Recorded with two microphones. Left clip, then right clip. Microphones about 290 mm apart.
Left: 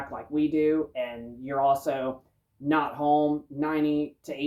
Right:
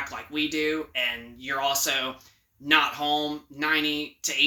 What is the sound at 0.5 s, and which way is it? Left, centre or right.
Speech, right.